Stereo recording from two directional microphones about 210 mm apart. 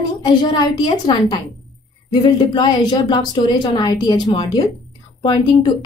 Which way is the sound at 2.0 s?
20° left (ahead or behind).